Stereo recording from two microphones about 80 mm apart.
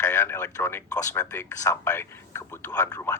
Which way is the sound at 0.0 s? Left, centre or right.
Left.